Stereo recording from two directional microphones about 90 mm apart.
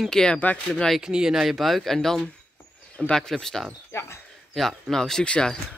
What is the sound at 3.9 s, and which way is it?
Speech, 30° left (ahead or behind).